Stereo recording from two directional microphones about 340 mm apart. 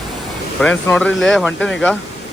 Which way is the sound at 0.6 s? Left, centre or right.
Centre.